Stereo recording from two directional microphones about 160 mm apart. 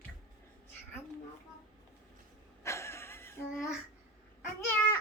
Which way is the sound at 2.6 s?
15° left (ahead or behind).